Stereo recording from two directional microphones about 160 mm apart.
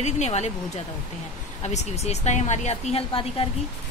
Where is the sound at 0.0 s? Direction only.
45° left (ahead or behind).